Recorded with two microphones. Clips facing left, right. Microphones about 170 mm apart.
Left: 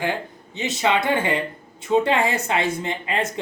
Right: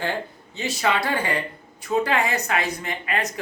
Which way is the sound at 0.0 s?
15° left (ahead or behind).